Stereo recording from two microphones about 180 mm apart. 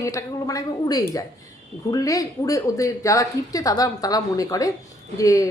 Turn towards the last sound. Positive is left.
turn(degrees=20)  # may be behind; listen again after turning